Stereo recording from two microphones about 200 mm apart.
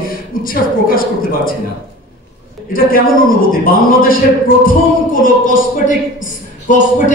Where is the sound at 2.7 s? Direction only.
45° left (ahead or behind).